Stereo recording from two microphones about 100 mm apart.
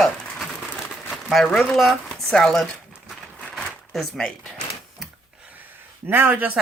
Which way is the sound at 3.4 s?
5° left (ahead or behind).